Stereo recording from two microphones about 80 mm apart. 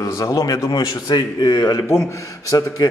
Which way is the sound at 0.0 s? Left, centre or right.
Left.